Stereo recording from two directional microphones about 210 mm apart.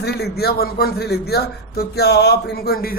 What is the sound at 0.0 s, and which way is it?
Speech, 50° left (ahead or behind).